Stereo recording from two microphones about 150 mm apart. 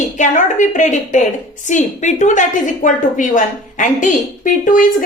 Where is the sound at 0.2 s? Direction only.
55° left (ahead or behind).